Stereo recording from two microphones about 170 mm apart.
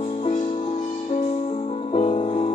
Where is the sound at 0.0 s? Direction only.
35° left (ahead or behind).